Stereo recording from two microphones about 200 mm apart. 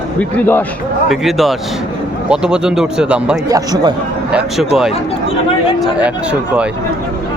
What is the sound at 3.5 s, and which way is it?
Speech, 20° right (ahead or behind).